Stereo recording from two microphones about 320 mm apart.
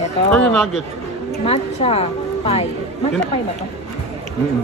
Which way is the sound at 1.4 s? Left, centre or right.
Centre.